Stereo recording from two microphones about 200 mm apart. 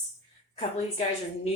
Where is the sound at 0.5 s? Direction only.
30° left (ahead or behind).